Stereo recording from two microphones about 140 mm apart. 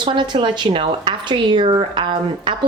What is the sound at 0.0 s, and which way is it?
A woman's voice, 35° right (ahead or behind).